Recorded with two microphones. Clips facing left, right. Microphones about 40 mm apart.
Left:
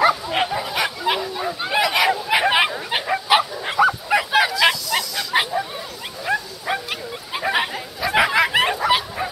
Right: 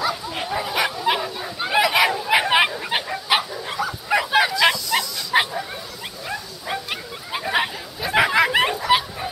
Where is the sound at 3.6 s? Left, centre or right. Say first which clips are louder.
Left 8 dB; left.